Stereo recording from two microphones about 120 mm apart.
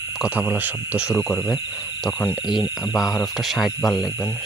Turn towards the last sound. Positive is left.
turn(degrees=0)  # may be behind; listen again after turning